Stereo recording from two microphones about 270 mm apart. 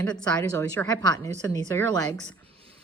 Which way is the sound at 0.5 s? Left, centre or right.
Centre.